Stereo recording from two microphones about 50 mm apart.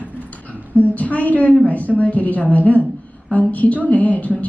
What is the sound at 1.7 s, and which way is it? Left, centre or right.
A woman's voice, left.